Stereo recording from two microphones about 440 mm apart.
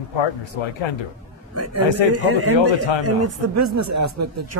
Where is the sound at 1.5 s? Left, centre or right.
Right.